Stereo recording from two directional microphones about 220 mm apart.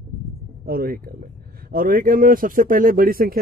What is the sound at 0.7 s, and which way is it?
Speech, 45° right (ahead or behind).